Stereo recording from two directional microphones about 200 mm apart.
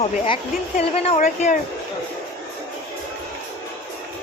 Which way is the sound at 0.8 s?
30° left (ahead or behind).